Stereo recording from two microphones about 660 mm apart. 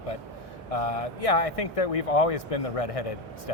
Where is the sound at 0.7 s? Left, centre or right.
Left.